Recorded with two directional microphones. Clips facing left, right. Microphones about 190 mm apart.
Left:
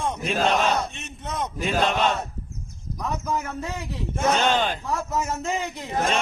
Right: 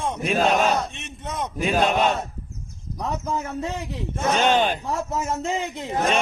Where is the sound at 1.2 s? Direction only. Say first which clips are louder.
Right 2 dB; 10° right (ahead or behind).